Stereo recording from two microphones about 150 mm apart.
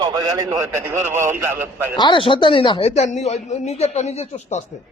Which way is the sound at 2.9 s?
50° left (ahead or behind).